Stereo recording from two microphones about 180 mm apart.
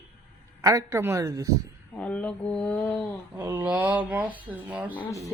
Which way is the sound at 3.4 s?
10° right (ahead or behind).